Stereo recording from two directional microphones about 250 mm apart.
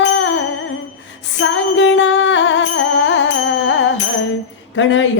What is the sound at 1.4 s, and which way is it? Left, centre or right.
Music, left.